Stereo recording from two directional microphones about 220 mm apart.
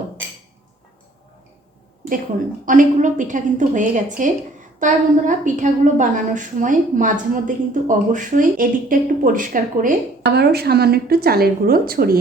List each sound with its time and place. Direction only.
2.6 s a woman's voice: 35° right (ahead or behind)